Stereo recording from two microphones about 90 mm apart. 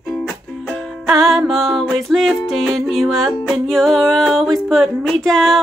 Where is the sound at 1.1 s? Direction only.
Centre (ahead or behind).